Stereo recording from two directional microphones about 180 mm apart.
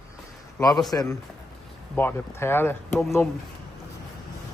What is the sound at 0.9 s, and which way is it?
A man's voice, 20° left (ahead or behind).